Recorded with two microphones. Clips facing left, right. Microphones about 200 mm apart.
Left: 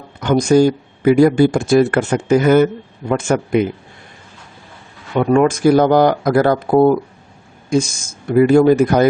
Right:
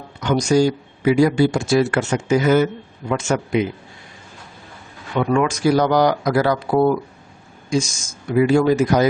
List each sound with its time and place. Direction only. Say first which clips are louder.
0.2 s speech: left 4 dB; 55° left (ahead or behind)
5.1 s speech: left 5 dB; 40° left (ahead or behind)